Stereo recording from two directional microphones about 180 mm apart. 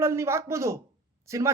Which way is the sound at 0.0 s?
15° right (ahead or behind).